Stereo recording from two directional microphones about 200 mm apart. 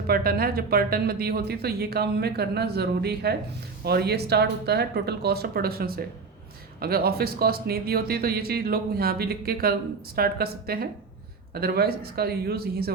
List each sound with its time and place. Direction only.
0.1 s speech: 50° right (ahead or behind)